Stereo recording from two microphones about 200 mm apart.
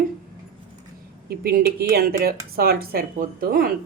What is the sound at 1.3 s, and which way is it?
Speech, 50° right (ahead or behind).